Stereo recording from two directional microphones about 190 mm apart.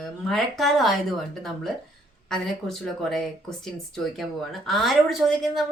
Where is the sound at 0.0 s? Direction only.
Centre (ahead or behind).